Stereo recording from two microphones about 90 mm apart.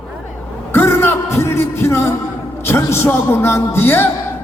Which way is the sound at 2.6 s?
30° left (ahead or behind).